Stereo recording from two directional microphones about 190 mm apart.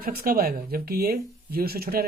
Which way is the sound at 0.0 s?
50° right (ahead or behind).